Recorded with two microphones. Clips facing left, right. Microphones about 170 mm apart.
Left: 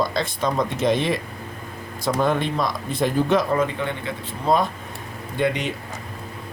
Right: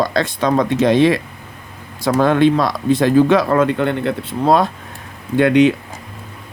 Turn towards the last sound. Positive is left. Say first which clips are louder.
# right 11 dB
turn(degrees=-80)